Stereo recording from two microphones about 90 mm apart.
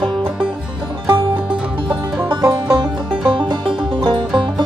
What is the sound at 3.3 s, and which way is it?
Music, 65° right (ahead or behind).